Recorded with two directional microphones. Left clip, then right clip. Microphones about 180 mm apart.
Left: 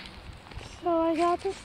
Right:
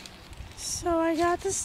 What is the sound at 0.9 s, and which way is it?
Speech, 15° right (ahead or behind).